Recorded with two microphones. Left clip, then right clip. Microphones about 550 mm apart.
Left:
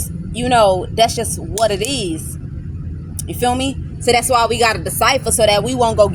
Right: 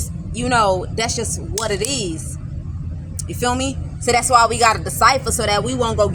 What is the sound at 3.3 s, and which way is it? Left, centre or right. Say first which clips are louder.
A woman's voice: left 3 dB; left.